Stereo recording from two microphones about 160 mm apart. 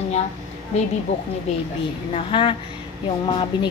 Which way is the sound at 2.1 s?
35° left (ahead or behind).